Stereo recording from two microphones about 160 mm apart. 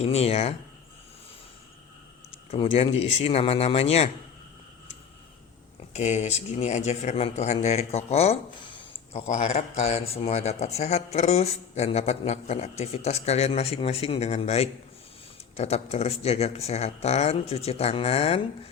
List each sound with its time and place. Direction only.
0.0 s speech: 40° left (ahead or behind)
2.5 s speech: 35° left (ahead or behind)
5.9 s speech: 45° left (ahead or behind)
9.1 s speech: 45° left (ahead or behind)